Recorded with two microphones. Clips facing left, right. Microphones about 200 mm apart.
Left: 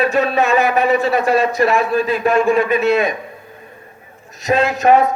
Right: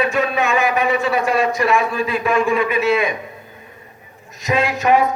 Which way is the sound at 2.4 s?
50° left (ahead or behind).